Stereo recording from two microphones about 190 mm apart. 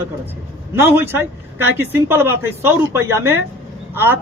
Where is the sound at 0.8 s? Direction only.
10° right (ahead or behind).